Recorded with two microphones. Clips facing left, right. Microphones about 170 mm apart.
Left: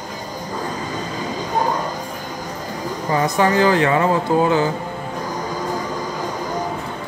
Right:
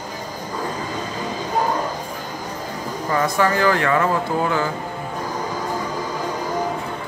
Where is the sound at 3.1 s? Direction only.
20° left (ahead or behind).